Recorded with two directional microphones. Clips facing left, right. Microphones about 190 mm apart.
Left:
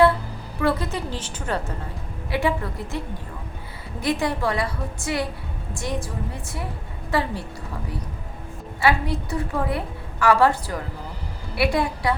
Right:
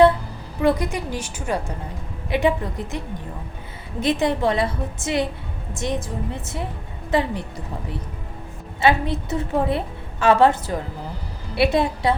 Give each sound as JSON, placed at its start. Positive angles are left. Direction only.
{"t": 0.6, "sound": "a woman's voice", "side_deg": -15}
{"t": 4.0, "sound": "a woman's voice", "side_deg": -20}
{"t": 8.8, "sound": "a woman's voice", "side_deg": -20}